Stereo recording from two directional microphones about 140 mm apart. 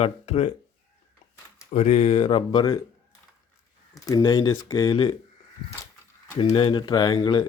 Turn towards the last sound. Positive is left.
turn(degrees=30)  # may be behind; listen again after turning